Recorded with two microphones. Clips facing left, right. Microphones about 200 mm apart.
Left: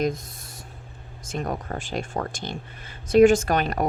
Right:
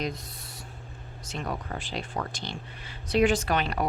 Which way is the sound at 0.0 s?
45° left (ahead or behind).